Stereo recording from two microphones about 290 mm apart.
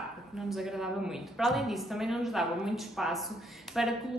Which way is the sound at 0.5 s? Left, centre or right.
Centre.